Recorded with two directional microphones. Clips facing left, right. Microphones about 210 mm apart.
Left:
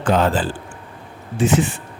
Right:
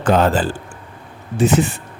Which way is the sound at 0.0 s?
45° right (ahead or behind).